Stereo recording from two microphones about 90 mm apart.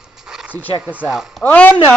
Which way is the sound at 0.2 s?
5° right (ahead or behind).